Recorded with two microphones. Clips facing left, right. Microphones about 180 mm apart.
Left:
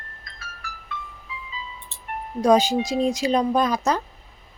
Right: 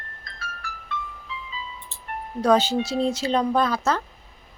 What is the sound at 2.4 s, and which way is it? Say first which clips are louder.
Speech: left 2 dB; 10° left (ahead or behind).